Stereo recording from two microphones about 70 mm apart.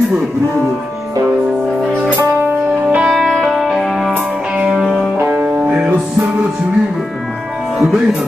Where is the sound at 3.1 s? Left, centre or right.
Centre.